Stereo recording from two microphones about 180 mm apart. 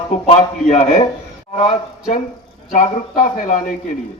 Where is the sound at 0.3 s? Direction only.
40° left (ahead or behind).